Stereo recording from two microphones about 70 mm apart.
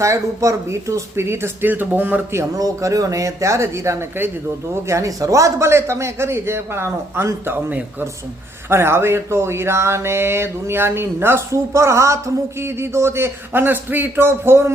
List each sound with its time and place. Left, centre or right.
0.0 s speech: right
1.6 s speech: right
2.3 s speech: right